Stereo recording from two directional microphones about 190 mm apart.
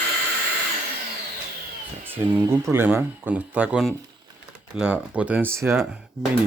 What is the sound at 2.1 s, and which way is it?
Speech, 10° right (ahead or behind).